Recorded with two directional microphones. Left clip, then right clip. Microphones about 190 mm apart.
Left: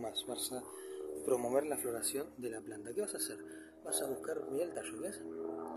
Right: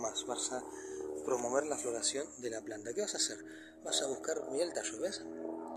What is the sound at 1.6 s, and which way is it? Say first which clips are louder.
Speech: right 2 dB; 10° left (ahead or behind).